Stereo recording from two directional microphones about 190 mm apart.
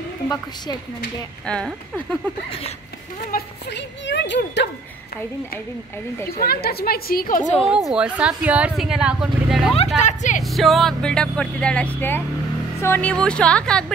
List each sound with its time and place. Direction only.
1.4 s speech: 5° left (ahead or behind)
3.7 s a child's voice: 65° left (ahead or behind)
6.4 s a woman's voice: 55° left (ahead or behind)
7.7 s speech: 5° right (ahead or behind)
9.9 s a woman's voice: 40° left (ahead or behind)
10.4 s speech: centre (ahead or behind)